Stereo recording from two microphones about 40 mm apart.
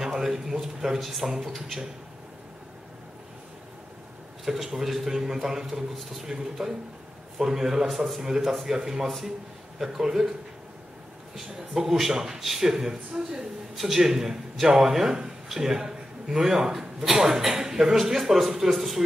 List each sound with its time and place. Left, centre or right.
0.0 s a man's voice: centre
4.6 s a man's voice: centre
6.2 s a man's voice: centre
9.0 s a man's voice: centre
11.3 s a man's voice: centre